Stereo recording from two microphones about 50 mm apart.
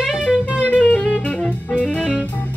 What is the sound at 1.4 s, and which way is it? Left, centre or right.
Music, left.